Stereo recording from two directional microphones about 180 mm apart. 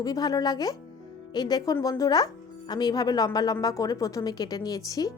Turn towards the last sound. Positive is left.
turn(degrees=20)  # may be behind; listen again after turning